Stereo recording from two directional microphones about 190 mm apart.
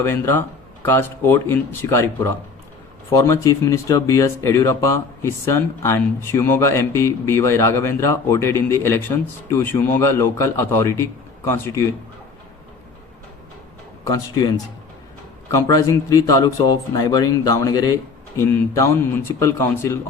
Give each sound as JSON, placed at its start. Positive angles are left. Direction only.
{"t": 0.0, "sound": "speech", "side_deg": 10}
{"t": 14.0, "sound": "speech", "side_deg": 20}